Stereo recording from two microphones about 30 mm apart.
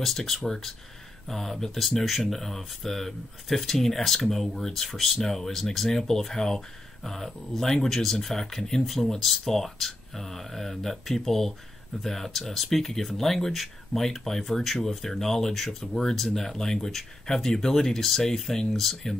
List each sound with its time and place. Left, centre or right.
0.0 s speech: centre
13.5 s speech: centre
14.0 s speech: centre